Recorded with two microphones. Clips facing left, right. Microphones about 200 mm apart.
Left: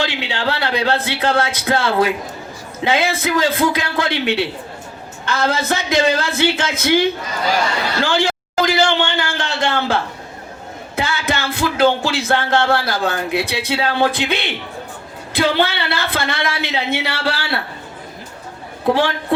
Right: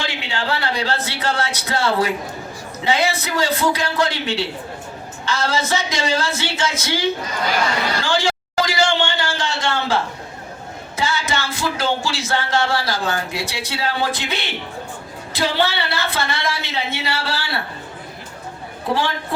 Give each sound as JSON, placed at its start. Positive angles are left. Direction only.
{"t": 0.0, "sound": "music", "side_deg": 70}
{"t": 2.8, "sound": "a man's voice", "side_deg": 55}
{"t": 3.5, "sound": "speech", "side_deg": 90}
{"t": 3.9, "sound": "music", "side_deg": 55}
{"t": 8.0, "sound": "a sound", "side_deg": 60}
{"t": 10.9, "sound": "music", "side_deg": 60}